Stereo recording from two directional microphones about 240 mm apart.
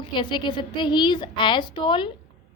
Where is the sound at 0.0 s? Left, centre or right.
Centre.